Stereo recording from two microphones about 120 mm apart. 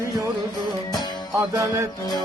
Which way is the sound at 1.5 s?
30° right (ahead or behind).